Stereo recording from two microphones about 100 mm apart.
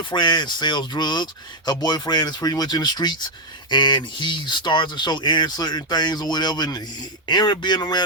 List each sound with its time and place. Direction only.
0.0 s speech: 50° left (ahead or behind)